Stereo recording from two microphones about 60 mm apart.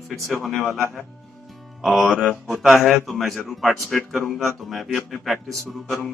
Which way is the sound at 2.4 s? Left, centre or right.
Centre.